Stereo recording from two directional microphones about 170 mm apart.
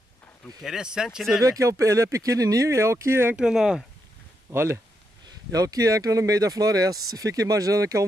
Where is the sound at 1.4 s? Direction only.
20° right (ahead or behind); by 3.8 s 5° right (ahead or behind).